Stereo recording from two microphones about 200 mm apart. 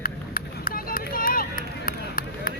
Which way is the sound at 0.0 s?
45° left (ahead or behind).